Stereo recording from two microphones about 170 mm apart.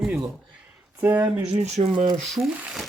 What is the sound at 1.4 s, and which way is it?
Speech, 40° right (ahead or behind).